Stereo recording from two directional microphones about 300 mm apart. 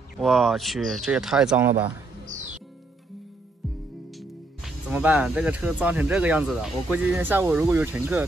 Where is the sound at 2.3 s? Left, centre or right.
Right.